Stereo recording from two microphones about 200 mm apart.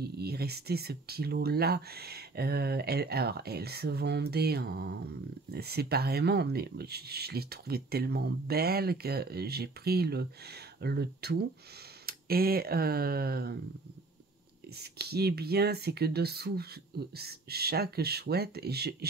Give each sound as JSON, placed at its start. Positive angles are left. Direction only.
{"t": 0.0, "sound": "speech", "side_deg": -50}
{"t": 14.8, "sound": "speech", "side_deg": -55}